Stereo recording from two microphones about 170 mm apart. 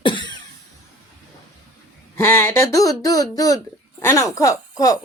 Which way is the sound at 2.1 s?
15° left (ahead or behind).